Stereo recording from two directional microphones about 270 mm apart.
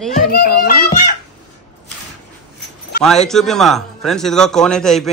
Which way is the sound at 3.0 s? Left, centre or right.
Centre.